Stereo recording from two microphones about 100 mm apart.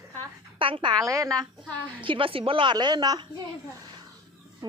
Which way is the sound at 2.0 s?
60° right (ahead or behind).